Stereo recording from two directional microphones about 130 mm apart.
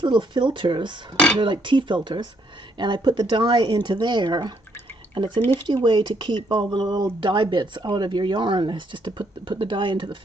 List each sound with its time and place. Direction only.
0.0 s speech: 35° right (ahead or behind)
5.4 s speech: 15° left (ahead or behind)
5.6 s speech: 35° right (ahead or behind)